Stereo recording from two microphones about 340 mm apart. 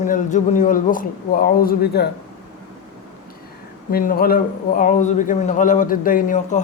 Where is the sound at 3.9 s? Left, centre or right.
Left.